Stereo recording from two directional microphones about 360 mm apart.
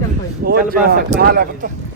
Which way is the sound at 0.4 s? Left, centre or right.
Right.